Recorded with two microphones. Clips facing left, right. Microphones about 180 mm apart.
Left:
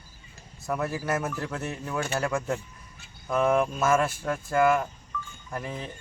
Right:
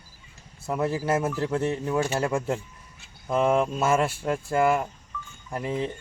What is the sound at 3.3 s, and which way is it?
Speech, 25° right (ahead or behind).